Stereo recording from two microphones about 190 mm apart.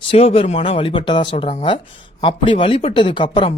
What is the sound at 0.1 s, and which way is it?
Speech, 30° left (ahead or behind).